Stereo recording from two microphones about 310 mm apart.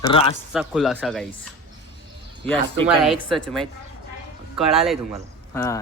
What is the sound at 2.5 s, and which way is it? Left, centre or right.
Speech, centre.